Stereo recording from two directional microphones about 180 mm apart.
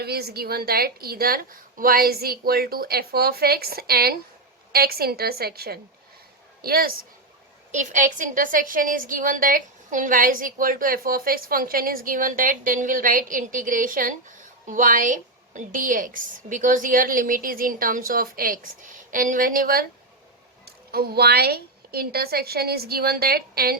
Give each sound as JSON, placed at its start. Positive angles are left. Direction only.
{"t": 0.0, "sound": "a woman's voice", "side_deg": -60}
{"t": 7.7, "sound": "a woman's voice", "side_deg": -45}